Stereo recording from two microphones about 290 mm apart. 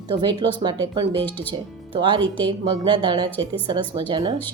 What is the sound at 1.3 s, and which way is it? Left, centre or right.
Speech, centre.